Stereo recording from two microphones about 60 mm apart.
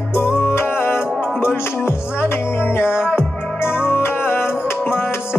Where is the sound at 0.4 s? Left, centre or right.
Left.